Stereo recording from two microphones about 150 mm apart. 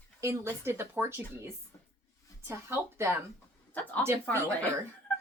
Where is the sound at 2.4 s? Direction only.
15° right (ahead or behind).